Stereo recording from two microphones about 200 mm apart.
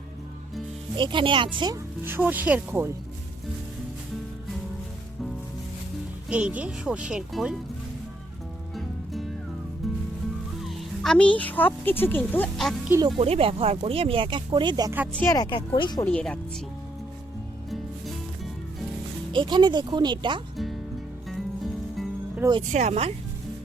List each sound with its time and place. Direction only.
0.9 s speech: 25° right (ahead or behind)
6.2 s speech: 5° right (ahead or behind)
9.8 s music: centre (ahead or behind)
10.6 s speech: centre (ahead or behind)
13.1 s speech: 30° right (ahead or behind)
15.1 s speech: 10° left (ahead or behind)
16.0 s speech: 5° left (ahead or behind)
19.3 s speech: 25° right (ahead or behind)
21.2 s music: centre (ahead or behind)
22.7 s speech: 35° right (ahead or behind)